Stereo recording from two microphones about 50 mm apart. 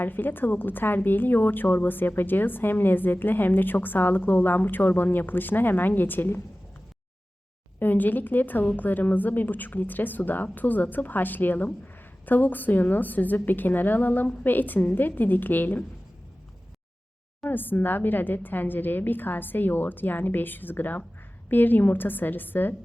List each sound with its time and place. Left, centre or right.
0.0 s a woman's voice: left
7.8 s a woman's voice: left
17.4 s a woman's voice: left